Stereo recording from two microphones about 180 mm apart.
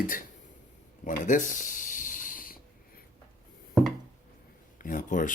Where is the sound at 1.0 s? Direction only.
45° left (ahead or behind).